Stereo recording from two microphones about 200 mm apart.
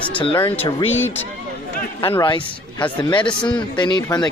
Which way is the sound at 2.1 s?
20° left (ahead or behind).